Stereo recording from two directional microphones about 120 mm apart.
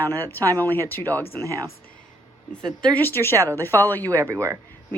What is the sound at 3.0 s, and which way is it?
A woman's voice, 20° left (ahead or behind).